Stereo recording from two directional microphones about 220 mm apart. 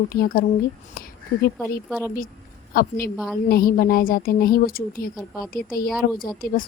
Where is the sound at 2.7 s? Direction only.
40° left (ahead or behind).